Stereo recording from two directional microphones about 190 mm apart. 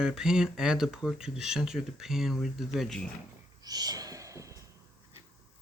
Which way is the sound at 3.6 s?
20° right (ahead or behind).